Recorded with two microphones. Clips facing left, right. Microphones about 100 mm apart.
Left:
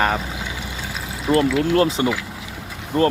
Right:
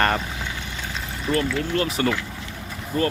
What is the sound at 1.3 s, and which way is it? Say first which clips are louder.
Speech: left 6 dB; 35° left (ahead or behind).